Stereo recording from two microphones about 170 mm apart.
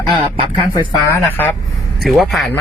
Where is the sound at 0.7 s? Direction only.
15° left (ahead or behind).